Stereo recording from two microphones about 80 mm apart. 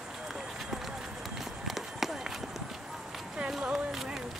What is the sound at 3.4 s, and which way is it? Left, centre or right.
Run, centre.